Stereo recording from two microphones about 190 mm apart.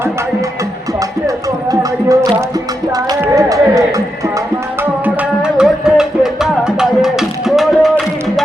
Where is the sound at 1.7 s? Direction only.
20° right (ahead or behind).